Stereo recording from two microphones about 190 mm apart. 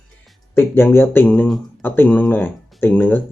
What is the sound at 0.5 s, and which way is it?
Speech, 10° left (ahead or behind).